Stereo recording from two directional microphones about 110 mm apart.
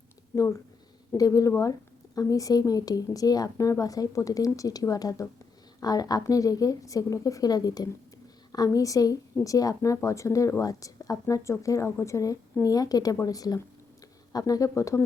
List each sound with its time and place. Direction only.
0.3 s a woman's voice: 30° left (ahead or behind)